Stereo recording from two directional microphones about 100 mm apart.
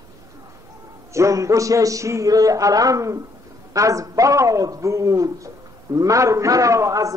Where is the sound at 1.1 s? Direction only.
30° right (ahead or behind).